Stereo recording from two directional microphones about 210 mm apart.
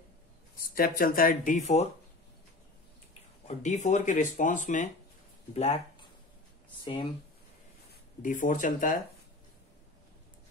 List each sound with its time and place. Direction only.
0.6 s speech: 45° left (ahead or behind)
3.4 s speech: 35° left (ahead or behind)
6.8 s speech: 25° left (ahead or behind)
8.2 s speech: 40° left (ahead or behind)